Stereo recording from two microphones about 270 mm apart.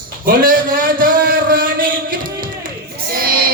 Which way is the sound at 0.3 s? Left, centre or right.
Right.